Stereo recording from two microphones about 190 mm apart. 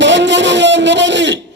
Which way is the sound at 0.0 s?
70° right (ahead or behind).